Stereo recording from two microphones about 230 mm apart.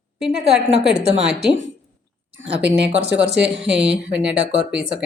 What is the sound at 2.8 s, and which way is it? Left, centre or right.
Speech, right.